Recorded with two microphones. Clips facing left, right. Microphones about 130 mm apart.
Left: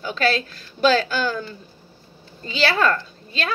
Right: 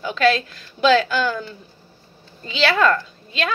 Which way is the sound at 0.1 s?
35° left (ahead or behind).